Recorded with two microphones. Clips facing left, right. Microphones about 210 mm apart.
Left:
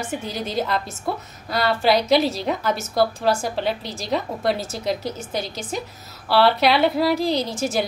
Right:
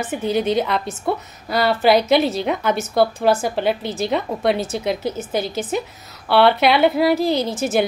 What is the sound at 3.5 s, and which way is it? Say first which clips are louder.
A woman's voice: right 4 dB; 55° right (ahead or behind).